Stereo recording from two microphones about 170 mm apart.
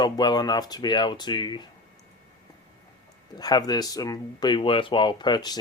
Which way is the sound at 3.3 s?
25° left (ahead or behind).